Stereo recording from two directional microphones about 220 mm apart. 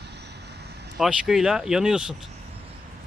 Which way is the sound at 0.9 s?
Centre (ahead or behind).